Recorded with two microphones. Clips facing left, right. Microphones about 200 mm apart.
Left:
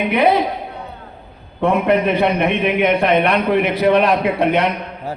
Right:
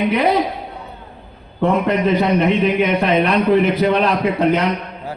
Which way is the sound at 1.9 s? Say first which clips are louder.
Left 1 dB; 60° left (ahead or behind).